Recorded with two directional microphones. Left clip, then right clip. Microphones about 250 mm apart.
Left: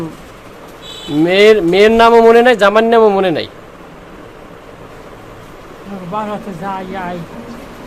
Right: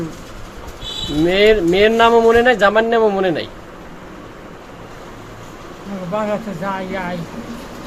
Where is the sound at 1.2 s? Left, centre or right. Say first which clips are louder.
Left 4 dB; left.